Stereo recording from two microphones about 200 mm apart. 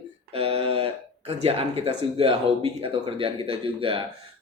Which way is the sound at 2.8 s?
25° right (ahead or behind).